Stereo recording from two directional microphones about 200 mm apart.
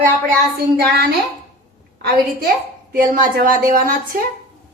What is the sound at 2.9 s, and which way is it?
A woman's voice, 45° right (ahead or behind).